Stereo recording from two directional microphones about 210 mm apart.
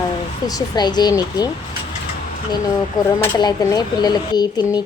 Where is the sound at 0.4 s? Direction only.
20° left (ahead or behind).